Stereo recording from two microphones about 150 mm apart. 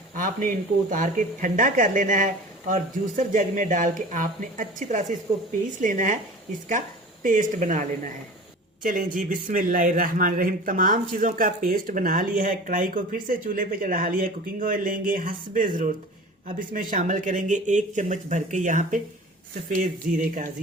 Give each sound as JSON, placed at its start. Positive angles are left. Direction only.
{"t": 0.2, "sound": "a man's voice", "side_deg": -60}